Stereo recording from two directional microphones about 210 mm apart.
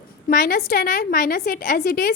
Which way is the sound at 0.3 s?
45° left (ahead or behind).